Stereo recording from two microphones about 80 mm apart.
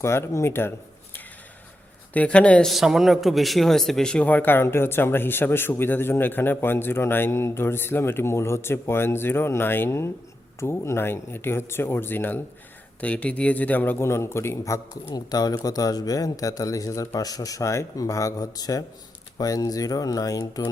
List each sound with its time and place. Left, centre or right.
0.0 s speech: left
2.1 s speech: centre
2.6 s a man's voice: centre; by 14.8 s left
15.1 s speech: left